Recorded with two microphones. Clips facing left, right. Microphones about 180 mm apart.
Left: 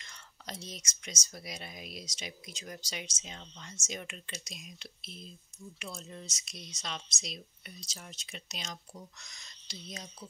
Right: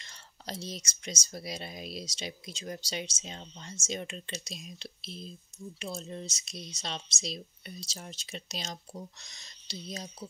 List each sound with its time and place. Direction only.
0.0 s speech: 30° right (ahead or behind)